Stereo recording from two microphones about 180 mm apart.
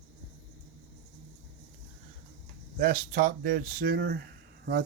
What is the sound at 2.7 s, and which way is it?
Speech, 50° right (ahead or behind).